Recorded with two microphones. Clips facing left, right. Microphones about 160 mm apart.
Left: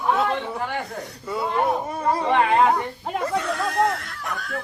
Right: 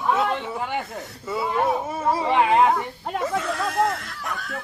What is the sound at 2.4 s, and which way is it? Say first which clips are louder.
Speech: right 2 dB; 15° right (ahead or behind).